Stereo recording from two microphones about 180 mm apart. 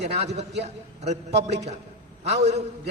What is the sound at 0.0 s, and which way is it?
A man's voice, 40° right (ahead or behind).